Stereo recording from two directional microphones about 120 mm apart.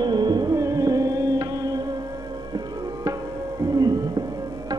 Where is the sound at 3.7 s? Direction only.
35° right (ahead or behind).